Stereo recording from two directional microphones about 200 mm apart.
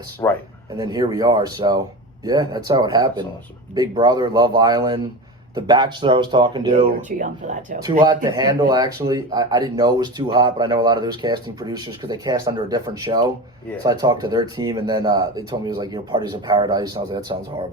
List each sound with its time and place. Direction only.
0.2 s speech: 15° left (ahead or behind)
0.8 s speech: 20° right (ahead or behind)
7.2 s speech: 40° right (ahead or behind)
8.0 s speech: 20° right (ahead or behind)